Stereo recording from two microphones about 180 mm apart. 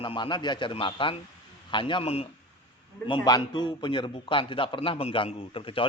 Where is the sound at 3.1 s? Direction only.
25° left (ahead or behind).